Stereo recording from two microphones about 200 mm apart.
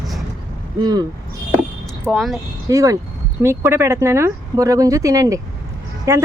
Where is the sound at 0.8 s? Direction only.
20° right (ahead or behind).